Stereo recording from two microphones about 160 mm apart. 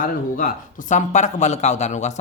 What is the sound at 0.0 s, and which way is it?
Speech, 60° left (ahead or behind).